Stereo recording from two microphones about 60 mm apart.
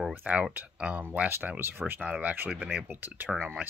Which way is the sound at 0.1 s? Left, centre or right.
Right.